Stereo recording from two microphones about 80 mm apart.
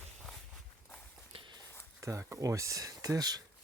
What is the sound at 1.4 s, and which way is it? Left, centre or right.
Walk, right.